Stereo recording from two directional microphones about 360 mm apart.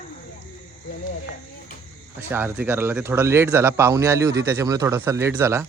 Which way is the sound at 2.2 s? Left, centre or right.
Centre.